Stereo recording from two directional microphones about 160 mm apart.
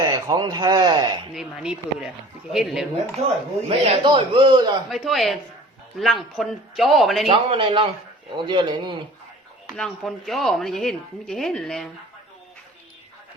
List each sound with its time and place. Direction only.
0.0 s speech: 25° right (ahead or behind)
1.3 s a woman's voice: centre (ahead or behind)
3.7 s a man's voice: 35° right (ahead or behind)
4.9 s a woman's voice: centre (ahead or behind)
7.3 s a man's voice: 30° right (ahead or behind)
9.6 s a woman's voice: centre (ahead or behind)